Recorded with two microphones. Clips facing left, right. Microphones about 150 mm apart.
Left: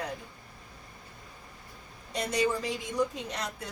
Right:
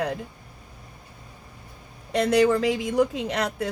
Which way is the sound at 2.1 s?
90° right.